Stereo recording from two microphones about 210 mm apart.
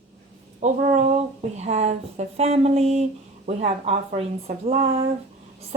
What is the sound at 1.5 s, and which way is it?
Speech, 30° right (ahead or behind).